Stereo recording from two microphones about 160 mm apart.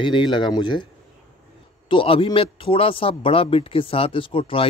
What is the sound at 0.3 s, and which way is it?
Speech, 30° left (ahead or behind).